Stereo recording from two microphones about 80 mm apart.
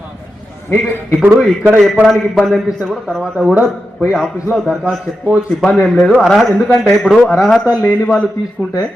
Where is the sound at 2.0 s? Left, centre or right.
Centre.